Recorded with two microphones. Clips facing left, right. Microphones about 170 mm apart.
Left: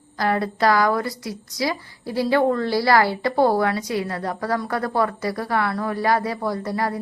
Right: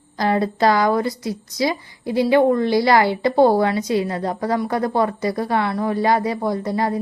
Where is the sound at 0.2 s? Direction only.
20° right (ahead or behind).